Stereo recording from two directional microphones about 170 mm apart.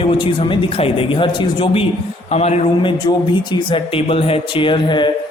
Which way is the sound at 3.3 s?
25° left (ahead or behind).